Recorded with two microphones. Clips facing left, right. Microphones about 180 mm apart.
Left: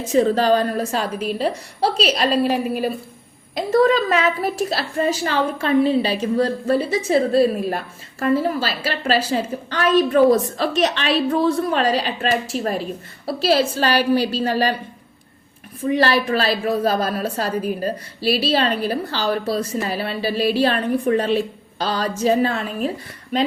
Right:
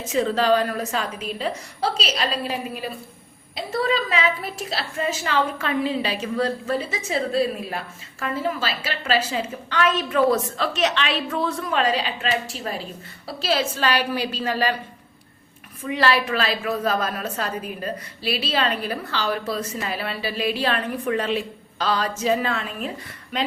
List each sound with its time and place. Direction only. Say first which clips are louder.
0.0 s a woman's voice: left 5 dB; 35° left (ahead or behind)
1.8 s a woman's voice: left 6 dB; 45° left (ahead or behind)
3.5 s a woman's voice: left 8 dB; 45° left (ahead or behind)
15.8 s a woman's voice: left 4 dB; 35° left (ahead or behind)